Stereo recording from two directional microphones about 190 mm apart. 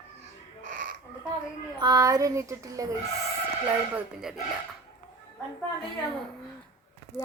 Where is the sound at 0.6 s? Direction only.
45° right (ahead or behind).